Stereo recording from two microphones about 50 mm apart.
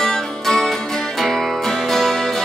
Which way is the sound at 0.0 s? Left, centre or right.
Centre.